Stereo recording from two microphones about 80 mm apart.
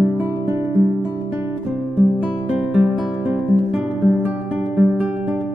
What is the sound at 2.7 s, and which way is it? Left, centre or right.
Music, centre.